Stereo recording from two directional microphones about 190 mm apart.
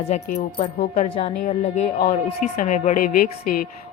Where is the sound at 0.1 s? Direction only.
35° left (ahead or behind).